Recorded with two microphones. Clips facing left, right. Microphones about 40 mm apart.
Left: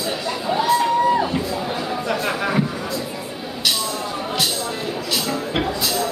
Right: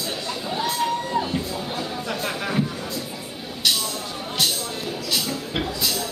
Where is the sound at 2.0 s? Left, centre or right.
Centre.